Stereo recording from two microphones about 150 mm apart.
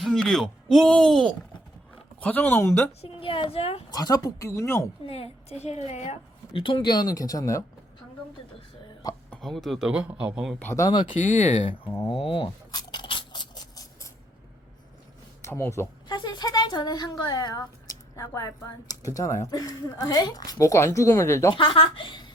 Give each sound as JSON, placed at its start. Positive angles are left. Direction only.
{"t": 0.0, "sound": "speech", "side_deg": 0}
{"t": 3.0, "sound": "speech", "side_deg": 35}
{"t": 3.9, "sound": "speech", "side_deg": 25}
{"t": 5.0, "sound": "a woman's voice", "side_deg": 40}
{"t": 6.5, "sound": "speech", "side_deg": 35}
{"t": 9.4, "sound": "a man's voice", "side_deg": 0}
{"t": 10.6, "sound": "speech", "side_deg": 20}
{"t": 11.1, "sound": "a woman's voice", "side_deg": 55}
{"t": 12.0, "sound": "a sound", "side_deg": 35}
{"t": 15.4, "sound": "speech", "side_deg": 15}
{"t": 16.0, "sound": "speech", "side_deg": 30}
{"t": 21.5, "sound": "speech", "side_deg": 35}